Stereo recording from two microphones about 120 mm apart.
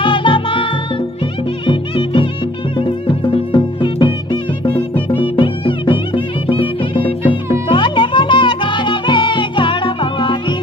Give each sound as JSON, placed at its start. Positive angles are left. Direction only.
{"t": 0.0, "sound": "music", "side_deg": 45}
{"t": 1.7, "sound": "music", "side_deg": 45}